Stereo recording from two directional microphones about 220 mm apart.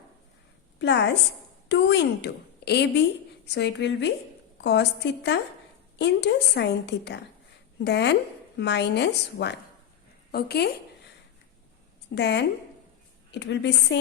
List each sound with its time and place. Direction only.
0.8 s a woman's voice: 50° left (ahead or behind)
12.1 s a woman's voice: 50° left (ahead or behind)